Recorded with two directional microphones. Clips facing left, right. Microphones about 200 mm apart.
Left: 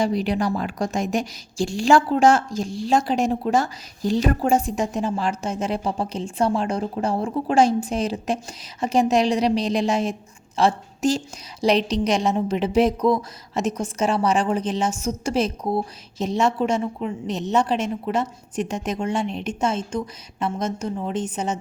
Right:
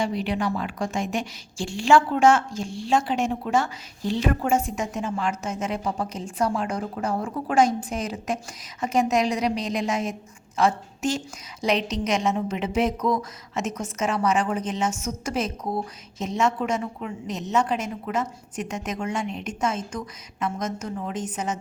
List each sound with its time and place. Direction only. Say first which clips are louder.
0.0 s a woman's voice: left 4 dB; 40° left (ahead or behind)